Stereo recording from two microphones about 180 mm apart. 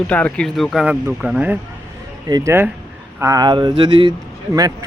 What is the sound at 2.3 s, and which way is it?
Speech, 20° right (ahead or behind).